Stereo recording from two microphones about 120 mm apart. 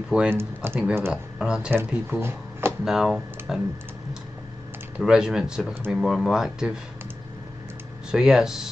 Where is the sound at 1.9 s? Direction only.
20° right (ahead or behind).